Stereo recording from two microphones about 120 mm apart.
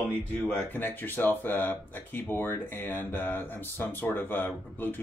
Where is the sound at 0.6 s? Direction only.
15° left (ahead or behind).